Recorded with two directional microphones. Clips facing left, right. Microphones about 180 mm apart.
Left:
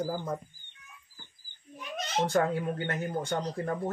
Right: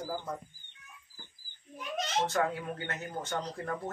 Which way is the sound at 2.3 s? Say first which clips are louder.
Left 4 dB; 30° left (ahead or behind).